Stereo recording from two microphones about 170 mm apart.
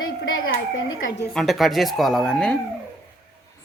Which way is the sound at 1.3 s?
Centre (ahead or behind).